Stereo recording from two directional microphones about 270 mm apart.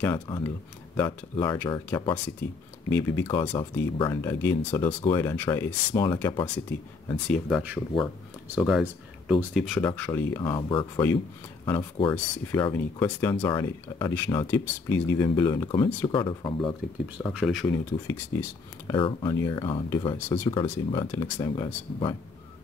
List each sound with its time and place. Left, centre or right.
0.0 s speech: centre
7.1 s speech: centre
17.3 s speech: centre